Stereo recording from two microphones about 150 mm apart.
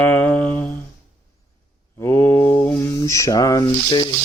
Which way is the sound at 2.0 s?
15° left (ahead or behind).